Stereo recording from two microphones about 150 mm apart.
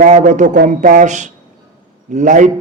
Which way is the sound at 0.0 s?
55° right (ahead or behind).